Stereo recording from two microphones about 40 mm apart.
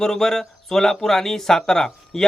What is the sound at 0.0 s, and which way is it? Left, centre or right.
Speech, centre.